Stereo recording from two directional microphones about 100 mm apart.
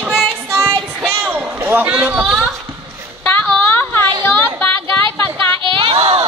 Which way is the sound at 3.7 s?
20° left (ahead or behind).